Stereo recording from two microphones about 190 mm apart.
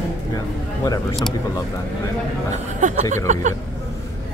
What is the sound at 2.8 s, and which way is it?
Speech, 40° right (ahead or behind).